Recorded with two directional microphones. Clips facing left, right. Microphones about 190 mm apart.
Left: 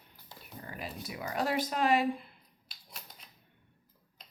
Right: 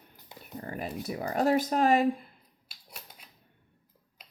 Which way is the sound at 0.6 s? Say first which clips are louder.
Right 7 dB; 45° right (ahead or behind).